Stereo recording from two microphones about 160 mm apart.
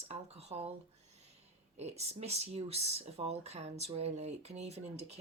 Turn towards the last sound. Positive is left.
turn(degrees=-40)  # may be behind; listen again after turning